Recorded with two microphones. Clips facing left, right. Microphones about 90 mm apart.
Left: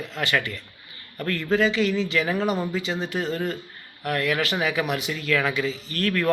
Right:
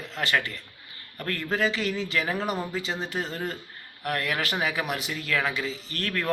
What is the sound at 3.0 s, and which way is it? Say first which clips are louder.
Speech: left 4 dB; 35° right (ahead or behind).